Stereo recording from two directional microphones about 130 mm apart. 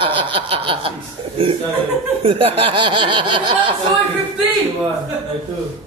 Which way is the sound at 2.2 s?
45° right (ahead or behind).